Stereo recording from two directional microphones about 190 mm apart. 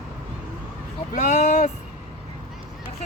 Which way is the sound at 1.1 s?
40° left (ahead or behind).